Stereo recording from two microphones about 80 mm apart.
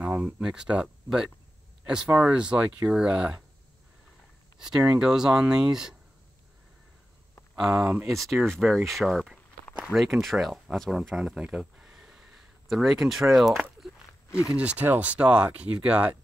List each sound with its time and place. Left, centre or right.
0.2 s speech: centre
4.6 s speech: centre
7.5 s speech: centre
11.4 s a sound: centre
14.4 s speech: centre